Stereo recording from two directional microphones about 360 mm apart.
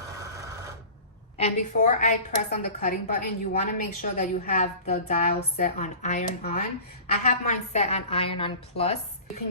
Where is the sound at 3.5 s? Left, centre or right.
Left.